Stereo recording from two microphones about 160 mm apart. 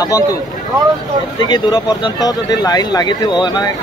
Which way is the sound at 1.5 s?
25° left (ahead or behind).